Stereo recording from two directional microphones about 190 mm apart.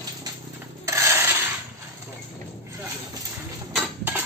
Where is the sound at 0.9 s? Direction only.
15° right (ahead or behind).